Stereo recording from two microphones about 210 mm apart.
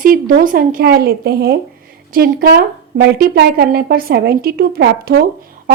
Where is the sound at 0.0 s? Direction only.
40° right (ahead or behind).